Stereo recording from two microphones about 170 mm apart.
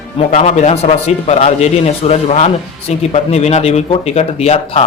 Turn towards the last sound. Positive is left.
turn(degrees=35)  # may be behind; listen again after turning